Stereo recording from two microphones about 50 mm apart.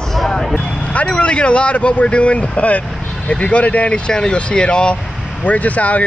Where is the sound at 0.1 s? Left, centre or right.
Centre.